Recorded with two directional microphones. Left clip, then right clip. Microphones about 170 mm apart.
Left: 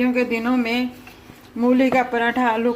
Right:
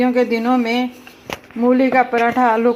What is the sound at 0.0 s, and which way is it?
Speech, 25° right (ahead or behind).